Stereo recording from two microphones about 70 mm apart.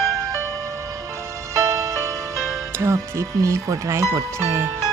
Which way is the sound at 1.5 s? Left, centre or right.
Right.